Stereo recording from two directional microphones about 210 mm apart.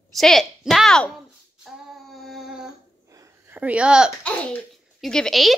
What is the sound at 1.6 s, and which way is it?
Female singing, centre (ahead or behind).